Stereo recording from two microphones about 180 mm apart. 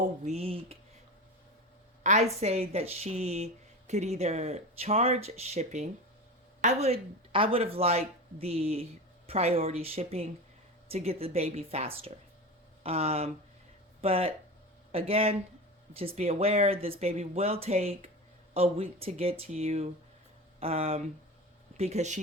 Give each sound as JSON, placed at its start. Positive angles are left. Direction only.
{"t": 0.3, "sound": "speech", "side_deg": -35}
{"t": 2.0, "sound": "speech", "side_deg": -40}